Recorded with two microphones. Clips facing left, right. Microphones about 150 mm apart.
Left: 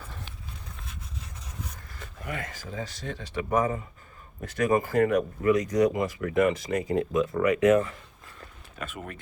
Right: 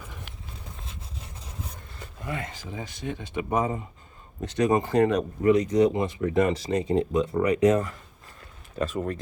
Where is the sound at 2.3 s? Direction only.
25° right (ahead or behind).